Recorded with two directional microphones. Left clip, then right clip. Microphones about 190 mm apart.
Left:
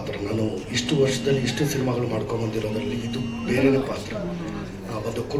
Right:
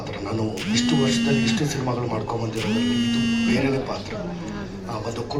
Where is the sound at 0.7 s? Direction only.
15° right (ahead or behind).